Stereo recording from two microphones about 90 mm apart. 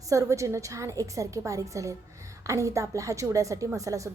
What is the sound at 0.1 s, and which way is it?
A woman's voice, 35° right (ahead or behind).